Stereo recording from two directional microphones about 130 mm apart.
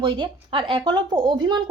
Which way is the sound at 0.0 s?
40° right (ahead or behind).